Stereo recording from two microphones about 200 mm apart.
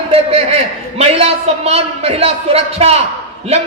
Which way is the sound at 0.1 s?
30° right (ahead or behind).